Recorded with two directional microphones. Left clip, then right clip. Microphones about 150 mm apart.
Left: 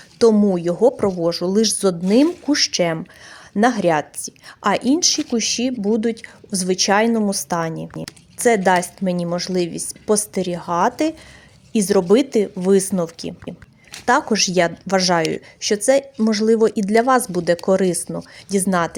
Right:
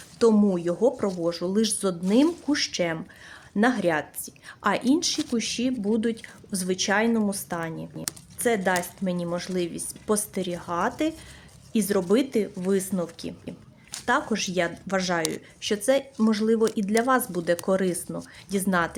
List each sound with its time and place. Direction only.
0.2 s a woman's voice: 25° left (ahead or behind); by 15.4 s 40° left (ahead or behind)
15.6 s a woman's voice: 30° left (ahead or behind)